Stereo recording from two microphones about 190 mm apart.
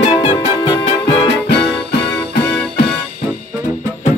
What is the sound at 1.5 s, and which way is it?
Music, 60° left (ahead or behind).